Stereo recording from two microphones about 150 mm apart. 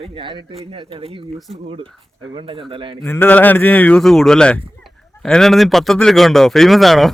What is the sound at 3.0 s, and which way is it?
Speech, 15° left (ahead or behind).